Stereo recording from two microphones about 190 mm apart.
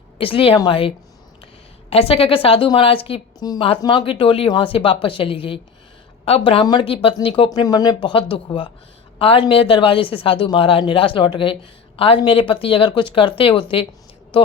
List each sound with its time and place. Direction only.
0.2 s a woman's voice: 30° left (ahead or behind)